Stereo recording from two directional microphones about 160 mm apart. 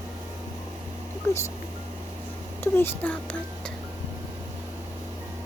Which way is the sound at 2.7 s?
10° left (ahead or behind).